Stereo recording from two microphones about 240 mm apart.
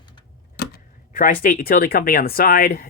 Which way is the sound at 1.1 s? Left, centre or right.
Left.